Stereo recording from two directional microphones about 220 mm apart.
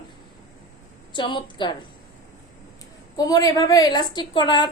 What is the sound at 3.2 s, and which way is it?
A woman's voice, 15° left (ahead or behind).